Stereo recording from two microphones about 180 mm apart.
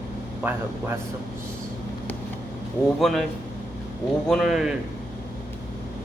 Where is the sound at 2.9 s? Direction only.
Centre (ahead or behind).